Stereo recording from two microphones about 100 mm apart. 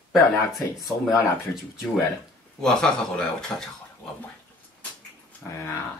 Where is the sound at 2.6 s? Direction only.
5° left (ahead or behind).